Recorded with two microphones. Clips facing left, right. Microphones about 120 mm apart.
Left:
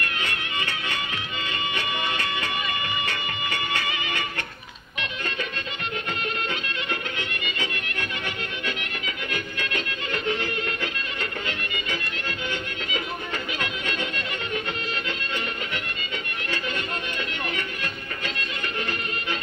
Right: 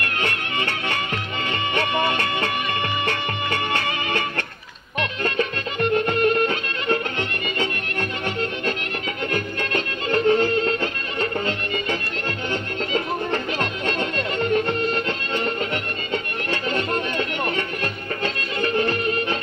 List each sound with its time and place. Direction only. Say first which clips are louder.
0.2 s music: right 5 dB; 55° right (ahead or behind); by 11.8 s 35° right (ahead or behind)
12.9 s music: right 8 dB; 45° right (ahead or behind)